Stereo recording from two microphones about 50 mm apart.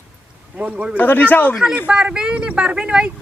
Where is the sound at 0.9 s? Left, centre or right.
Left.